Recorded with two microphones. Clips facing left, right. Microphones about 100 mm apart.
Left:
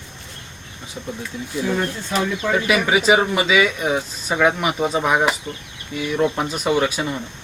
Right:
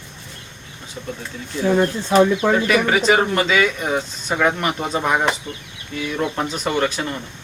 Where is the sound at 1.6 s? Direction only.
20° right (ahead or behind).